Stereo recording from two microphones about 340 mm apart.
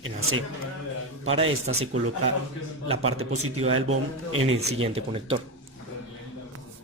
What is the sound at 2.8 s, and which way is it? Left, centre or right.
A man's voice, right.